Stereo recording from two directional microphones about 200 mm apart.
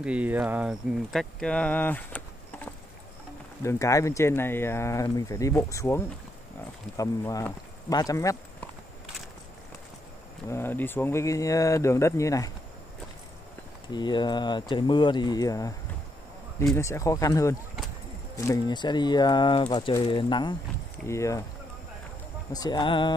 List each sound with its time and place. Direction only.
0.0 s speech: 5° right (ahead or behind); by 8.4 s 15° left (ahead or behind)
10.5 s speech: 10° left (ahead or behind)
13.9 s speech: 20° left (ahead or behind)
16.7 s speech: 15° left (ahead or behind)
22.5 s speech: 20° left (ahead or behind)